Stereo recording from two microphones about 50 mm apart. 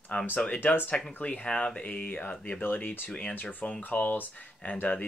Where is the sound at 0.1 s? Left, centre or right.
Left.